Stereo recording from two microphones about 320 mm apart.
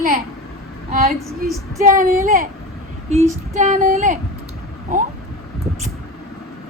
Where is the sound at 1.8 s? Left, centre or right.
Right.